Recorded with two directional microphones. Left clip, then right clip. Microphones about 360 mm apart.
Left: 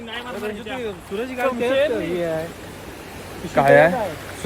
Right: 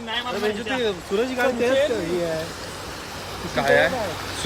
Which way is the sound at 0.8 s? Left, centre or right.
Right.